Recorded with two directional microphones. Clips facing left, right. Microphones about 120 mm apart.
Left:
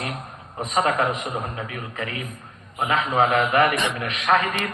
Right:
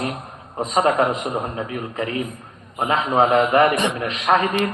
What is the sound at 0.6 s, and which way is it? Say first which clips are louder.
A man's voice: right 4 dB; 35° right (ahead or behind).